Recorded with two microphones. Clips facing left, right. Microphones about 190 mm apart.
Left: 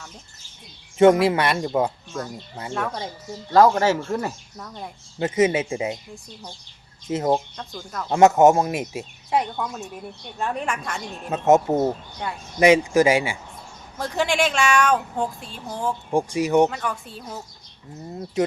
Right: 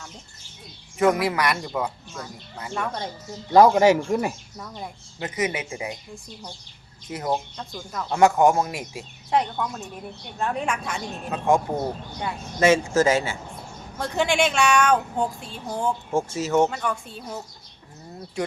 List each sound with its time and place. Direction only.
0.9 s speech: 25° left (ahead or behind)
2.7 s speech: 5° left (ahead or behind)
3.5 s speech: 15° right (ahead or behind)
5.2 s speech: 25° left (ahead or behind)
7.1 s speech: 25° left (ahead or behind)
7.5 s speech: centre (ahead or behind)
8.1 s speech: 25° left (ahead or behind)
9.3 s speech: 5° left (ahead or behind)
11.3 s speech: 25° left (ahead or behind)
14.0 s speech: centre (ahead or behind)
16.1 s speech: 15° left (ahead or behind)
16.6 s speech: centre (ahead or behind)